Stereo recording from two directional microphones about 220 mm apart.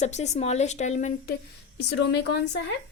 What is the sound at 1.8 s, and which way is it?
Speech, 50° left (ahead or behind).